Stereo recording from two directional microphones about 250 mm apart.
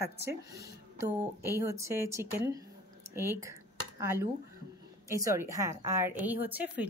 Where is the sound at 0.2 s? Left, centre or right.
Centre.